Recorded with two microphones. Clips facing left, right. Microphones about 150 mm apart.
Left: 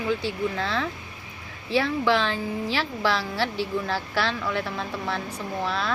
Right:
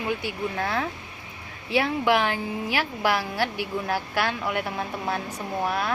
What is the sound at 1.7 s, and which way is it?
Speech, 15° right (ahead or behind).